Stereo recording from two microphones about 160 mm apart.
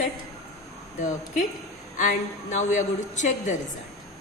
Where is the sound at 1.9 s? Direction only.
50° left (ahead or behind).